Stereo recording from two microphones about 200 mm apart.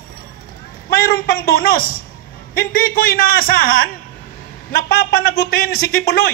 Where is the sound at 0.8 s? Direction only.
45° left (ahead or behind).